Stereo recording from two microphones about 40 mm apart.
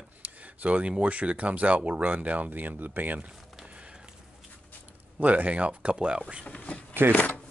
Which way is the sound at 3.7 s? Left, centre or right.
Right.